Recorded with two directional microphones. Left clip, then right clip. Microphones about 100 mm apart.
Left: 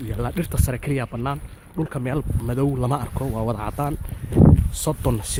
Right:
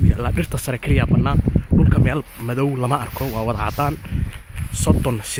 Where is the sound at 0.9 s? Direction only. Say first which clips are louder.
Right 6 dB; 5° left (ahead or behind).